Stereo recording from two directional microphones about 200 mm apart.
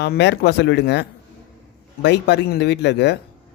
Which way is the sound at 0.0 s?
55° left (ahead or behind).